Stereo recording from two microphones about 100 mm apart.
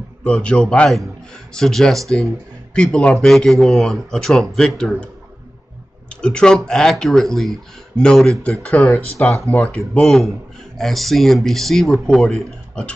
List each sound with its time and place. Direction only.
0.2 s a man's voice: 10° left (ahead or behind)
10.8 s a man's voice: centre (ahead or behind)